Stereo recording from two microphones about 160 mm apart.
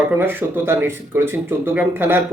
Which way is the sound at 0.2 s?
15° right (ahead or behind).